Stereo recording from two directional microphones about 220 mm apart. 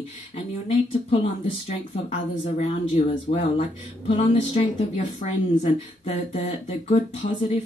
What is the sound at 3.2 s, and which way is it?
A woman's voice, 35° left (ahead or behind).